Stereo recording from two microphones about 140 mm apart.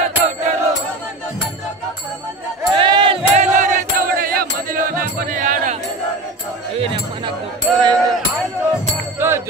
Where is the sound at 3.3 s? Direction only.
60° right (ahead or behind).